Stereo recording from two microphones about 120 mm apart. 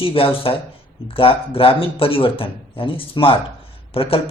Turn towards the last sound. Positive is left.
turn(degrees=50)  # may be behind; listen again after turning